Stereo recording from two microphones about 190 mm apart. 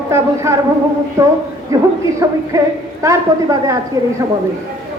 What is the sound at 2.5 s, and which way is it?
A man's voice, 15° right (ahead or behind).